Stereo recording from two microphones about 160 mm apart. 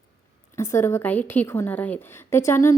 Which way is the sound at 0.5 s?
15° left (ahead or behind).